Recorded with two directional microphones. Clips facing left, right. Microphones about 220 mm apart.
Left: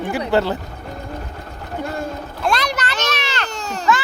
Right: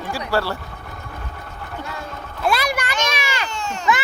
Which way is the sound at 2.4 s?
10° right (ahead or behind).